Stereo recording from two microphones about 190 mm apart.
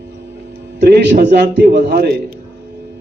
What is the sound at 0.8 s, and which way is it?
A man's voice, 60° right (ahead or behind).